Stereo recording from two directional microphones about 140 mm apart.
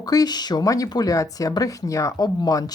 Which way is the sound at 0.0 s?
25° left (ahead or behind).